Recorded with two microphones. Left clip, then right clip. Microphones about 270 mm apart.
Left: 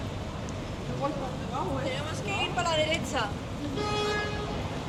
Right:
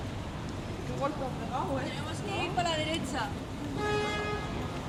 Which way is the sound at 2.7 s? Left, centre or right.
Left.